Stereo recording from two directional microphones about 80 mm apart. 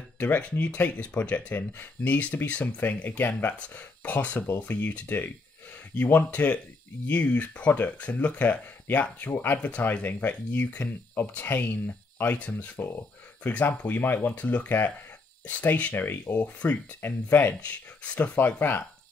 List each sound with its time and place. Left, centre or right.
0.2 s speech: centre
17.6 s speech: centre